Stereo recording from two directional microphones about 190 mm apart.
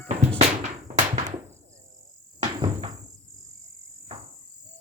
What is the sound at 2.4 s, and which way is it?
Cricket, 25° right (ahead or behind).